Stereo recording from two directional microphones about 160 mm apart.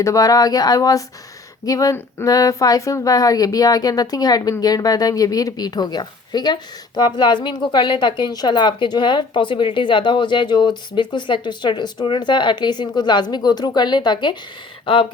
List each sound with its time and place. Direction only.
0.0 s a woman's voice: 20° left (ahead or behind)